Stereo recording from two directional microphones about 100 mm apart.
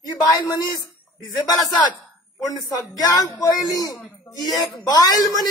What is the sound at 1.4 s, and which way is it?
Speech, 45° left (ahead or behind).